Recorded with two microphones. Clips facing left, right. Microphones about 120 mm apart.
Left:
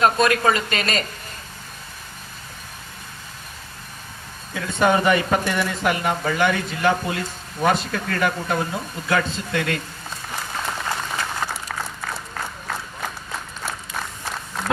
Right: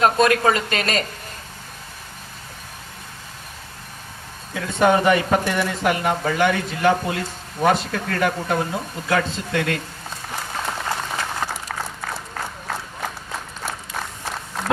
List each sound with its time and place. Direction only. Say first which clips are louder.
0.2 s speech: right 1 dB; 50° right (ahead or behind)
4.9 s speech: right 1 dB; 45° right (ahead or behind)
5.2 s speech: right 2 dB; 30° right (ahead or behind)
5.5 s speech: right 1 dB; 50° right (ahead or behind)
10.2 s applause: right 1 dB; 40° right (ahead or behind)